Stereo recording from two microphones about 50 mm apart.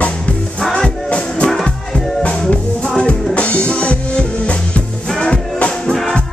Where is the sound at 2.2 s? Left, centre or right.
Left.